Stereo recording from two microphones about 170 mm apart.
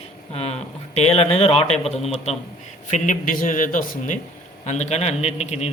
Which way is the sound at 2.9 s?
50° left (ahead or behind).